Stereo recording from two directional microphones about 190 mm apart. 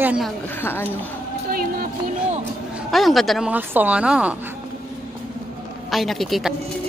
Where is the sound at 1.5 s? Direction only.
50° right (ahead or behind).